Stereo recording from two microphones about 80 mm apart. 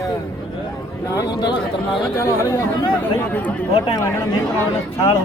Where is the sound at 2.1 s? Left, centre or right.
Left.